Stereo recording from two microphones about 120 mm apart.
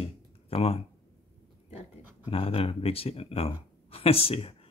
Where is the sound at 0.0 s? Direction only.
55° left (ahead or behind).